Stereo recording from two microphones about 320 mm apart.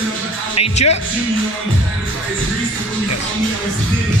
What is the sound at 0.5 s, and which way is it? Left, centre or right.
Speech, centre.